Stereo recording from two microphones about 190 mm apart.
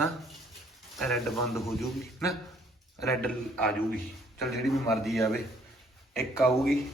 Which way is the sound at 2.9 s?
Centre (ahead or behind).